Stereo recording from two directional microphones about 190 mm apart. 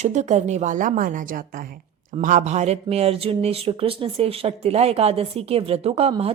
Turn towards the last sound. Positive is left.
turn(degrees=-30)  # may be behind; listen again after turning